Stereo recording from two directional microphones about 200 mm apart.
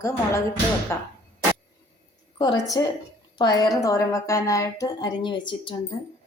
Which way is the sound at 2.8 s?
20° left (ahead or behind).